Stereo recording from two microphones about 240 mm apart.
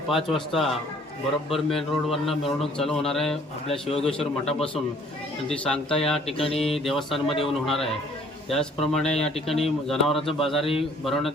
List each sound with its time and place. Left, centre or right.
0.1 s a man's voice: centre
3.8 s a man's voice: left
4.4 s a man's voice: centre
6.3 s a man's voice: left
6.7 s a man's voice: centre